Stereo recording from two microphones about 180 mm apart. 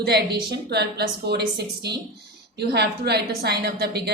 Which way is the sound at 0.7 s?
65° right (ahead or behind).